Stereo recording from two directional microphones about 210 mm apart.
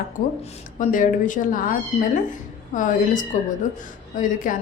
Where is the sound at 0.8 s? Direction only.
40° left (ahead or behind).